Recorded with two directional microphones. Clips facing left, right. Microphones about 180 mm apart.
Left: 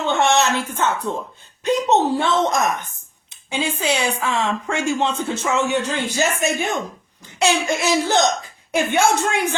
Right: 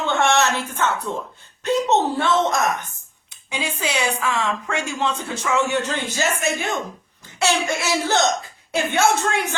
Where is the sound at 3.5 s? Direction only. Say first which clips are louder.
Left 4 dB; 25° left (ahead or behind).